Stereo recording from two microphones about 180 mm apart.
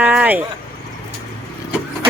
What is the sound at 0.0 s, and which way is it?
Vehicle, 10° right (ahead or behind).